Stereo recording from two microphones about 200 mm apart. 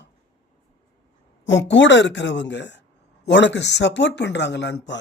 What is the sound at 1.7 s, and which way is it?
Speech, 65° left (ahead or behind).